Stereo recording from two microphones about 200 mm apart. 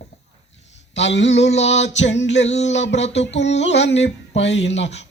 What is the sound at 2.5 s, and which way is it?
Humming, 35° left (ahead or behind).